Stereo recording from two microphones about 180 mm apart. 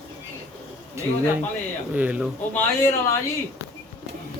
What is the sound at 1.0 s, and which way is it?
Speech, 15° right (ahead or behind).